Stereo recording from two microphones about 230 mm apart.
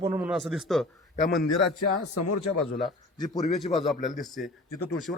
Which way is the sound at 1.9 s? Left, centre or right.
Left.